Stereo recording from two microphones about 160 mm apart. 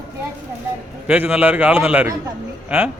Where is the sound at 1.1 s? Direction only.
5° right (ahead or behind).